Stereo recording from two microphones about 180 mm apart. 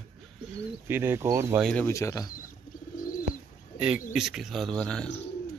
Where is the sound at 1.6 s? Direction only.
10° left (ahead or behind).